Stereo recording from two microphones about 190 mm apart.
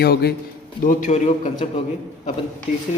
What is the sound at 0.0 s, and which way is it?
Speech, 55° left (ahead or behind).